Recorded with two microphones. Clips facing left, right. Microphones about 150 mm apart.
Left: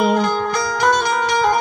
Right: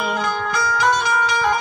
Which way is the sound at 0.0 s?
40° left (ahead or behind).